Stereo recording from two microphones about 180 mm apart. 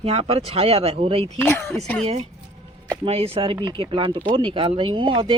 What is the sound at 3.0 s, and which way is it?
Speech, 35° right (ahead or behind).